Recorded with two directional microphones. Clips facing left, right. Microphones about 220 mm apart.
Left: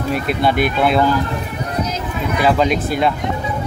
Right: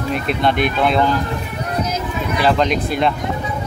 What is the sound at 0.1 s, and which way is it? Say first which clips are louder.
Speech: left 1 dB; 5° left (ahead or behind).